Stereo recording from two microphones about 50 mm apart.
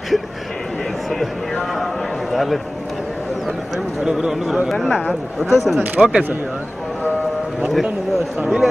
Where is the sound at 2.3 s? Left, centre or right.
Centre.